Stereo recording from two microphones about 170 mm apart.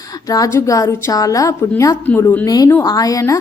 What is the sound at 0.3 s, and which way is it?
A woman's voice, 20° left (ahead or behind).